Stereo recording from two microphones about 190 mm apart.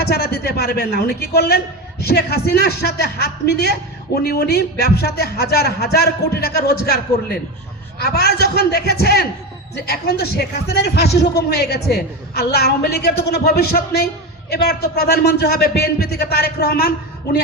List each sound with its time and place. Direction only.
0.0 s a man's voice: 55° left (ahead or behind)